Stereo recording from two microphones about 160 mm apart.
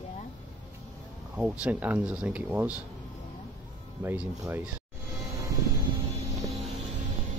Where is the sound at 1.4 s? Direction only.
10° right (ahead or behind).